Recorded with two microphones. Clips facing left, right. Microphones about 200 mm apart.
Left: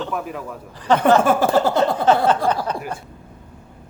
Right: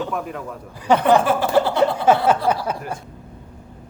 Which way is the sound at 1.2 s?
45° left (ahead or behind).